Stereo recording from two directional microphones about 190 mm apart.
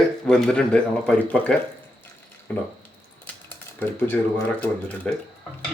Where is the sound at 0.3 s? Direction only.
5° left (ahead or behind).